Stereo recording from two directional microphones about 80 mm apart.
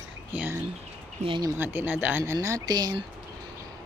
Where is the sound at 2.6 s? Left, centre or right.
Right.